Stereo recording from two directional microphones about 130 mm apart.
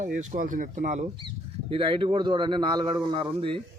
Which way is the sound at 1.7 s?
40° right (ahead or behind).